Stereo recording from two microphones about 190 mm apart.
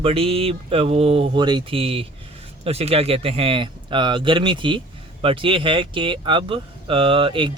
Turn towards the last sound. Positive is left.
turn(degrees=-25)  # may be behind; listen again after turning